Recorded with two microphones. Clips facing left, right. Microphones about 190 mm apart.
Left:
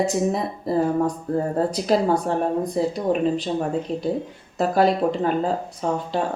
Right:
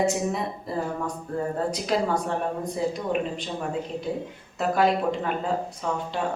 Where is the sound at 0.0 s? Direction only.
35° left (ahead or behind).